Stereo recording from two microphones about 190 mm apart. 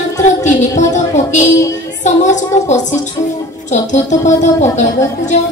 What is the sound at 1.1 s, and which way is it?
A woman's voice, 40° left (ahead or behind).